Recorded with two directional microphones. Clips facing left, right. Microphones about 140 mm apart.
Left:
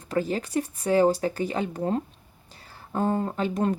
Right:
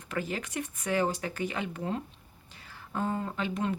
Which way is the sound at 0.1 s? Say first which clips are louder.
Left 8 dB; 35° left (ahead or behind).